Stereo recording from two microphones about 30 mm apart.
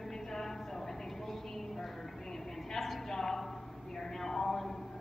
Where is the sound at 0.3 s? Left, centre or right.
Centre.